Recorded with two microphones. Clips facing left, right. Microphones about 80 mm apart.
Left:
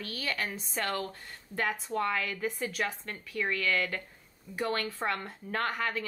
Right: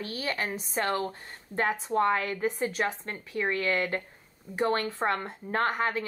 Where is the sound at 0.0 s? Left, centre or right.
Right.